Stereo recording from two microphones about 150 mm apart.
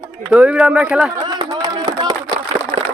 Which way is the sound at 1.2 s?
30° right (ahead or behind).